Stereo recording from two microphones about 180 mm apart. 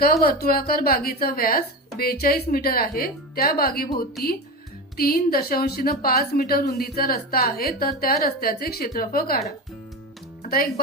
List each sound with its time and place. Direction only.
0.0 s a woman's voice: 60° left (ahead or behind)
10.4 s speech: 55° left (ahead or behind)